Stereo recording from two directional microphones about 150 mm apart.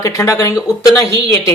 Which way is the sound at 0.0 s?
20° left (ahead or behind).